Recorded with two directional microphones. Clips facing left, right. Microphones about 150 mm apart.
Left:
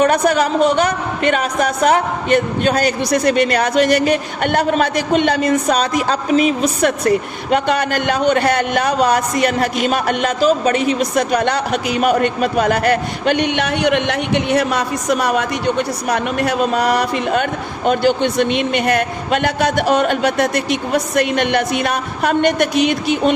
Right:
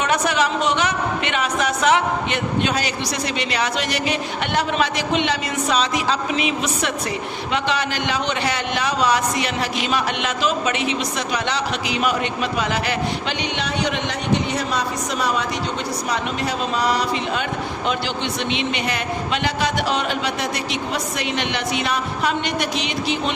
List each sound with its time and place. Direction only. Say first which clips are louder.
0.0 s speech: left 6 dB; 45° left (ahead or behind)